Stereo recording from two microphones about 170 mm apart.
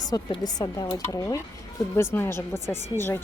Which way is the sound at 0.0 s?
20° left (ahead or behind).